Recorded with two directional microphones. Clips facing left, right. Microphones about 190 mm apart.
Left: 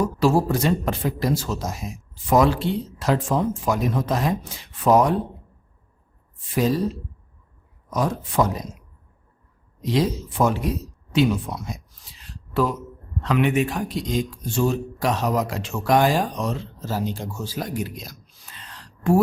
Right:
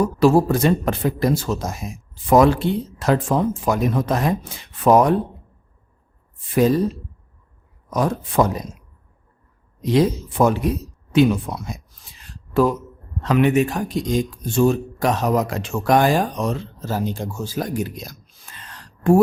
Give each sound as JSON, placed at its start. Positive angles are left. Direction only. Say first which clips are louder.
{"t": 0.2, "sound": "a man's voice", "louder": "right 5 dB", "side_deg": -55}
{"t": 6.5, "sound": "a man's voice", "louder": "right 5 dB", "side_deg": -55}
{"t": 7.9, "sound": "a man's voice", "louder": "right 3 dB", "side_deg": -55}
{"t": 9.8, "sound": "speech", "louder": "right 4 dB", "side_deg": -55}